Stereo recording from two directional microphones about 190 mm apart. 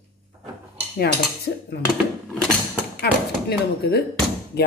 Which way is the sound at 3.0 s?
60° left (ahead or behind).